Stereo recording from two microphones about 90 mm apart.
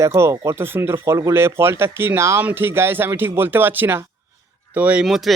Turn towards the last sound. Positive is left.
turn(degrees=0)  # may be behind; listen again after turning